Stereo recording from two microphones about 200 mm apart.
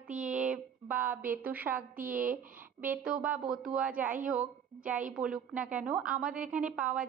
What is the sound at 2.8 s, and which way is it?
A woman's voice, 10° right (ahead or behind).